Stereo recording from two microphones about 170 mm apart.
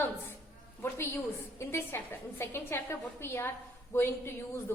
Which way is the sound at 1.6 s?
15° left (ahead or behind).